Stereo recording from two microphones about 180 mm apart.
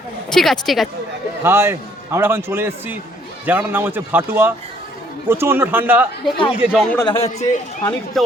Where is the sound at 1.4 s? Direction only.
15° right (ahead or behind).